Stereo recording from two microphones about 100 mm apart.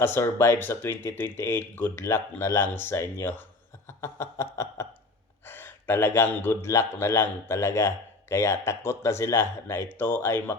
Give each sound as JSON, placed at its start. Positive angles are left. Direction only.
{"t": 0.0, "sound": "a man's voice", "side_deg": 25}
{"t": 3.8, "sound": "a sound", "side_deg": 30}
{"t": 5.5, "sound": "a man's voice", "side_deg": 20}